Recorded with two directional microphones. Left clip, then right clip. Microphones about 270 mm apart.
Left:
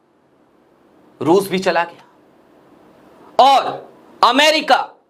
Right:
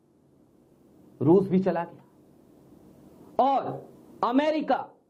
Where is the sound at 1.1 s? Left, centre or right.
Centre.